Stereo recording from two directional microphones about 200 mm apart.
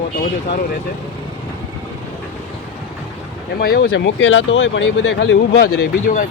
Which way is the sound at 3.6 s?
50° left (ahead or behind).